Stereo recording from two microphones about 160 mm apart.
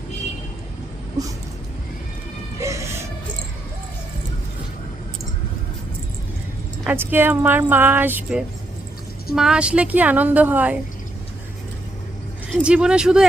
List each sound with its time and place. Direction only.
2.6 s music: 20° right (ahead or behind)
6.8 s speech: 15° right (ahead or behind)
12.5 s speech: 5° right (ahead or behind)